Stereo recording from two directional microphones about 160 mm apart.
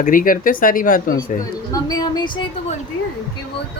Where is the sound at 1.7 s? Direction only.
25° left (ahead or behind).